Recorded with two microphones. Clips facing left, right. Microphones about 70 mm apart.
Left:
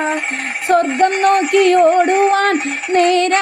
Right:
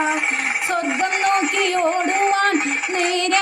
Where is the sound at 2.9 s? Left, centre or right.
Left.